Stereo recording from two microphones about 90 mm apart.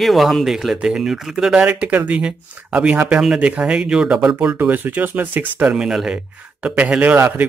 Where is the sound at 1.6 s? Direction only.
15° right (ahead or behind).